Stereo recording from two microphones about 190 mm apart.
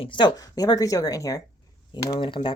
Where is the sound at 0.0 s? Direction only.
25° left (ahead or behind).